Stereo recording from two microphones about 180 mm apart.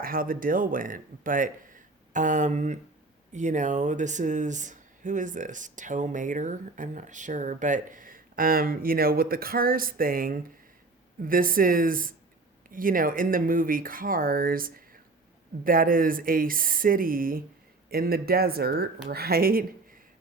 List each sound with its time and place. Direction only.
0.0 s a man's voice: 50° right (ahead or behind)